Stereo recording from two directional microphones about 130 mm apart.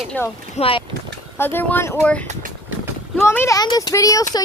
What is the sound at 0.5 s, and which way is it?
Speech, 45° left (ahead or behind).